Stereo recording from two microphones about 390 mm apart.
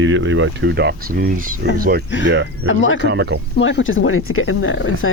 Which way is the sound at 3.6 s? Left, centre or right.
Left.